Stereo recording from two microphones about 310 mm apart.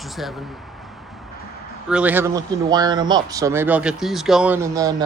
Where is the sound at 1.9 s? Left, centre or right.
Centre.